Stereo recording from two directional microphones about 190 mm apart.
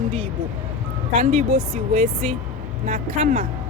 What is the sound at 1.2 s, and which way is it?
Speech, 35° right (ahead or behind).